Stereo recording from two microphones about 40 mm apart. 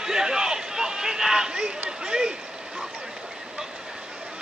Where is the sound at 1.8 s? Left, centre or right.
Centre.